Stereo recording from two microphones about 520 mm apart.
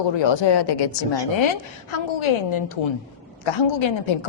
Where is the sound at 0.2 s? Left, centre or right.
Left.